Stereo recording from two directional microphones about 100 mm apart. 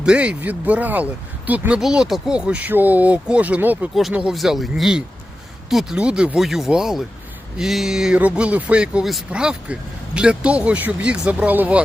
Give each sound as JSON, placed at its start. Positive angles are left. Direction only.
{"t": 0.0, "sound": "speech", "side_deg": -10}
{"t": 1.8, "sound": "speech", "side_deg": -5}
{"t": 4.1, "sound": "speech", "side_deg": -5}